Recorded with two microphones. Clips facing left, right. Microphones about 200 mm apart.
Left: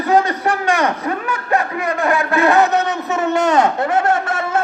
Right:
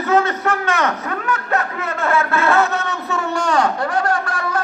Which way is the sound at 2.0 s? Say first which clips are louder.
Left 2 dB; 15° left (ahead or behind).